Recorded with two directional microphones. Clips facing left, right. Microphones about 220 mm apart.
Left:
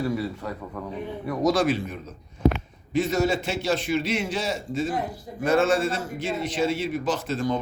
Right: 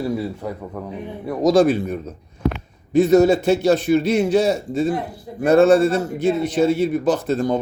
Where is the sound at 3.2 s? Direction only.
40° right (ahead or behind).